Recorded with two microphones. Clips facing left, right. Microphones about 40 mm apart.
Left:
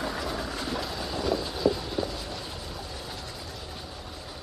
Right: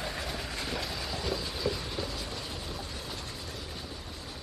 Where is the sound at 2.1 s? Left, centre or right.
Left.